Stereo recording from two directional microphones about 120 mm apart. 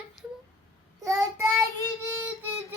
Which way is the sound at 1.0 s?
30° right (ahead or behind).